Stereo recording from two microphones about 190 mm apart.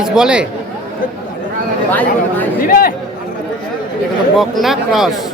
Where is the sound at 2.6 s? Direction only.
50° left (ahead or behind).